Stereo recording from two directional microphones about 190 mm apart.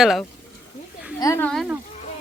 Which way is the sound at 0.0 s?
Centre (ahead or behind).